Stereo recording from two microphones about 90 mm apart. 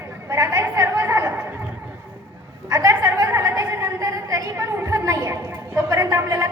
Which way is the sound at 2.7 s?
35° right (ahead or behind).